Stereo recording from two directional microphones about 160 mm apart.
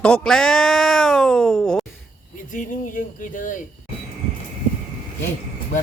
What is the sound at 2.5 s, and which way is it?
Speech, 55° left (ahead or behind).